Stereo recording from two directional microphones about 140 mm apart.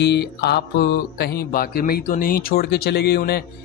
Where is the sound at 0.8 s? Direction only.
90° left.